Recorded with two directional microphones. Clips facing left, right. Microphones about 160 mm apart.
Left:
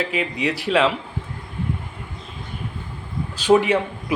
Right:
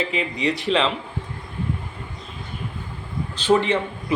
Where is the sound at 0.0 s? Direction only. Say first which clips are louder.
Even; centre (ahead or behind).